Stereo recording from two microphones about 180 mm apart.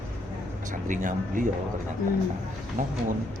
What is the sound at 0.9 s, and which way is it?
Speech, 45° right (ahead or behind).